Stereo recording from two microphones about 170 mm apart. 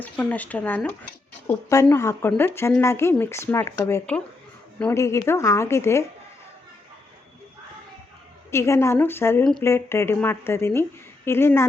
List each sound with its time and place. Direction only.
0.0 s speech: 10° left (ahead or behind)
8.4 s speech: 15° left (ahead or behind)
9.4 s speech: 5° left (ahead or behind)
9.6 s speech: 15° left (ahead or behind)